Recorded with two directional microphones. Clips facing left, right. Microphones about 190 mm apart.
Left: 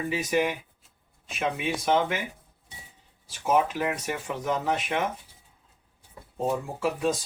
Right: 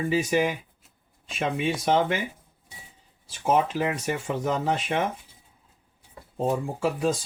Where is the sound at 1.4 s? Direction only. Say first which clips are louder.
Right 2 dB; 30° right (ahead or behind).